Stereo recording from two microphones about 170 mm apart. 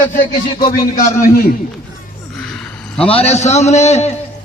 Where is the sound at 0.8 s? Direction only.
60° left (ahead or behind).